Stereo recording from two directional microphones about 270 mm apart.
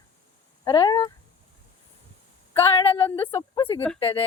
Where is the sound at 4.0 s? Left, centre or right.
Centre.